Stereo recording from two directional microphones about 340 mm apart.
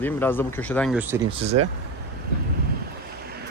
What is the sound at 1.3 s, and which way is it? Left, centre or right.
Speech, centre.